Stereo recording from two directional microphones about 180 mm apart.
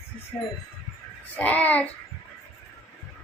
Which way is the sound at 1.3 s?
10° left (ahead or behind).